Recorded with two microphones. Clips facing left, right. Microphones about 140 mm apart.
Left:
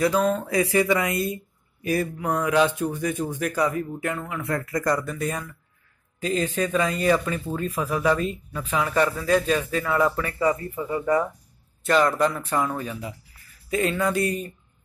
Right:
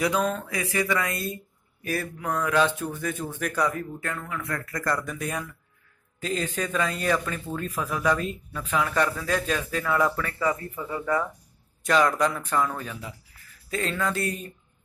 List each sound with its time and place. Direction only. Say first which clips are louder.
0.1 s speech: left 4 dB; 10° left (ahead or behind)
0.5 s speech: left 6 dB; 30° left (ahead or behind); by 4.1 s 5° left (ahead or behind)
4.1 s speech: left 3 dB; 25° left (ahead or behind)
5.0 s speech: left 4 dB; centre (ahead or behind)
6.3 s speech: left 4 dB; 10° left (ahead or behind)
11.8 s speech: left 2 dB; centre (ahead or behind)